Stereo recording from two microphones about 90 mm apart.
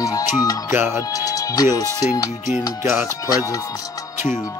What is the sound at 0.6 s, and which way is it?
Speech, 30° right (ahead or behind).